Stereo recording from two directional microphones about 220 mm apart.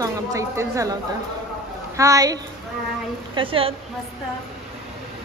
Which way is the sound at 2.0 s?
15° right (ahead or behind).